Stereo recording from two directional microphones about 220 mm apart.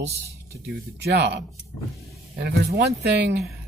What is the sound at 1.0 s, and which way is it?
Speech, 50° right (ahead or behind).